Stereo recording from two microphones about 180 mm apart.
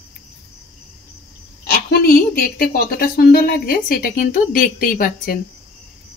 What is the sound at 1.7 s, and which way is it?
A woman's voice, 55° left (ahead or behind).